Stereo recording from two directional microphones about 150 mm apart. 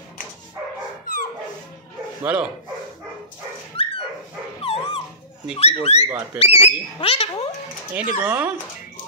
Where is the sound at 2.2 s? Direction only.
10° right (ahead or behind).